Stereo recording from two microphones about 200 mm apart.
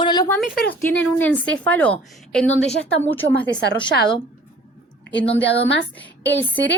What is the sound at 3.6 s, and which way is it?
Speech, 55° left (ahead or behind).